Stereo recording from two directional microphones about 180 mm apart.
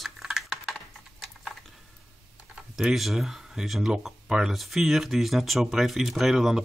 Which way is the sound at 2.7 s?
Centre (ahead or behind).